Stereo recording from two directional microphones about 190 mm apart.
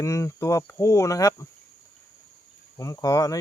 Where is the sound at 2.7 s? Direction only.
15° left (ahead or behind).